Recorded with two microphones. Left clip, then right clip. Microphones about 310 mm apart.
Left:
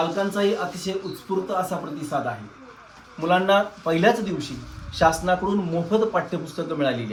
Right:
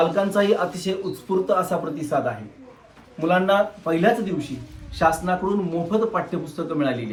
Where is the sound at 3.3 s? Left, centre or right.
Left.